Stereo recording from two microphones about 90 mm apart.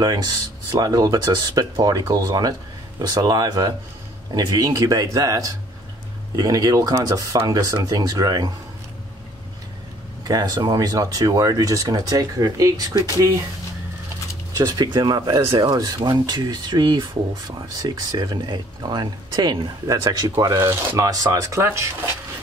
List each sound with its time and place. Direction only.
0.7 s speech: 45° right (ahead or behind)
10.2 s speech: 45° right (ahead or behind)
14.6 s speech: 50° right (ahead or behind)
20.0 s speech: 45° right (ahead or behind); by 22.1 s 25° right (ahead or behind)